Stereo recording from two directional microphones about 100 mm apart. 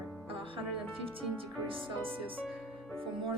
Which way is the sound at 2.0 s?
65° right (ahead or behind).